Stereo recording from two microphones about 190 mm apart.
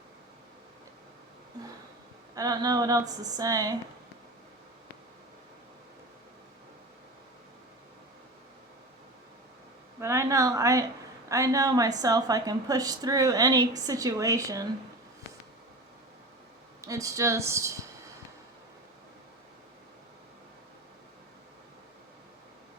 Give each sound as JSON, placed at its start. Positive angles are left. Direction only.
{"t": 2.3, "sound": "a woman's voice", "side_deg": -20}
{"t": 10.0, "sound": "a woman's voice", "side_deg": -15}
{"t": 16.8, "sound": "speech", "side_deg": -15}